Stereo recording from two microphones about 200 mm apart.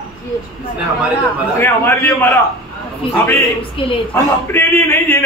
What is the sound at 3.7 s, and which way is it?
Speech, 25° left (ahead or behind).